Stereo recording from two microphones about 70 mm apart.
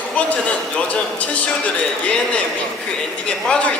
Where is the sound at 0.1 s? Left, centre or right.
Centre.